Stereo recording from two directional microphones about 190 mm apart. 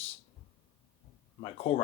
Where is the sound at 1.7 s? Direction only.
30° left (ahead or behind).